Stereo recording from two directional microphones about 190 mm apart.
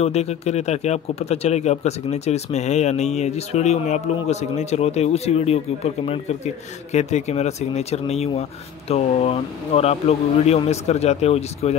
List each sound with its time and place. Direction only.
0.0 s speech: 35° left (ahead or behind)